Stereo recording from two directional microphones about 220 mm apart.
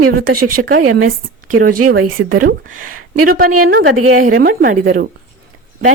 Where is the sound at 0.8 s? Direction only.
80° right.